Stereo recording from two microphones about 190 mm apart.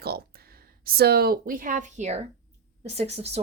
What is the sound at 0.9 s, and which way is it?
A woman's voice, 55° right (ahead or behind).